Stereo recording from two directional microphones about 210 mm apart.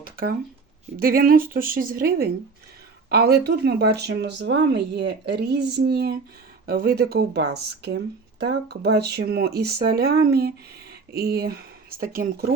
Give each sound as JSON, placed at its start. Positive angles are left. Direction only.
{"t": 0.0, "sound": "speech", "side_deg": -45}